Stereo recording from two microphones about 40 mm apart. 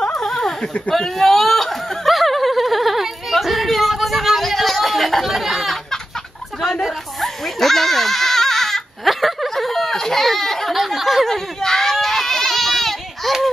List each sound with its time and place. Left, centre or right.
0.1 s a sound: centre
0.6 s speech: left
0.9 s snicker: centre
6.6 s goat: centre
9.1 s a sound: centre
11.2 s goat: centre